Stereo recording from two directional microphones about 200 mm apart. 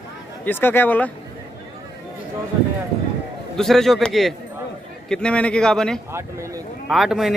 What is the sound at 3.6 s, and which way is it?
A man's voice, centre (ahead or behind).